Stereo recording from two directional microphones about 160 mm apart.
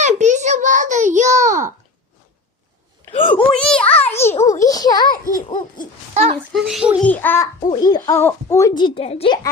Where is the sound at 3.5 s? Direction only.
5° left (ahead or behind).